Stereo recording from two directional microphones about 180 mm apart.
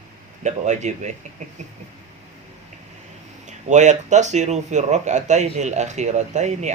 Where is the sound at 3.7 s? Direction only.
40° right (ahead or behind).